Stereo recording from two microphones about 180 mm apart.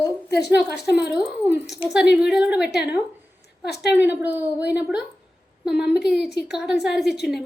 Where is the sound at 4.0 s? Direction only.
10° right (ahead or behind).